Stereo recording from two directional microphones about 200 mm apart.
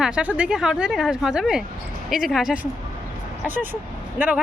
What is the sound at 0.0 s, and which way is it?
Speech, 5° right (ahead or behind).